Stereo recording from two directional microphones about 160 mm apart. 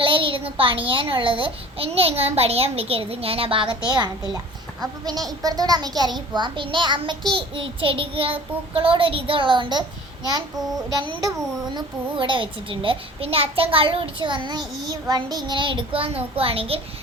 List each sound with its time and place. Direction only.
0.0 s a child's voice: 35° right (ahead or behind)
10.9 s a child's voice: 25° right (ahead or behind)